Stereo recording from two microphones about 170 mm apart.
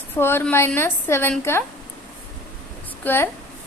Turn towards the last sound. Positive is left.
turn(degrees=15)  # may be behind; listen again after turning